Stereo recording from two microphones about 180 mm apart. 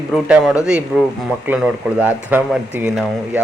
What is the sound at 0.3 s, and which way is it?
Speech, 5° right (ahead or behind).